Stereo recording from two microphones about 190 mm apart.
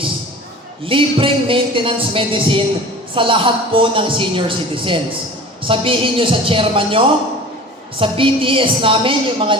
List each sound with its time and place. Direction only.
0.9 s speech: 30° right (ahead or behind)